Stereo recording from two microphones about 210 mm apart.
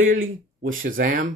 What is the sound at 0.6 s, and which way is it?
Speech, 40° right (ahead or behind).